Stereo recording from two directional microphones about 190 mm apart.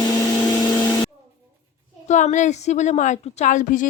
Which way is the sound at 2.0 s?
40° left (ahead or behind).